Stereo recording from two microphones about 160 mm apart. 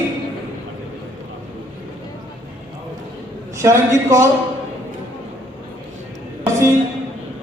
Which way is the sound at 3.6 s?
20° right (ahead or behind).